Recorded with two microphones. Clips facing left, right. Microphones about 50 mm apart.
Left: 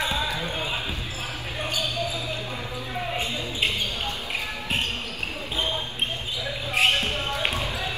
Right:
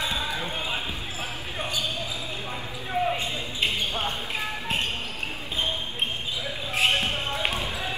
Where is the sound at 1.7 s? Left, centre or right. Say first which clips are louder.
Left 3 dB; left.